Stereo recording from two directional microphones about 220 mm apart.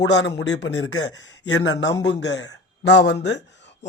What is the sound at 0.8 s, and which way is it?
Speech, 65° left (ahead or behind).